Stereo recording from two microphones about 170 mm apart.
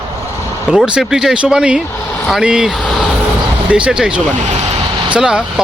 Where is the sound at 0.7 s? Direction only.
5° right (ahead or behind).